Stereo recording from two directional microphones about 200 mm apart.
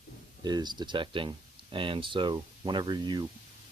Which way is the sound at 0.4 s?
20° right (ahead or behind).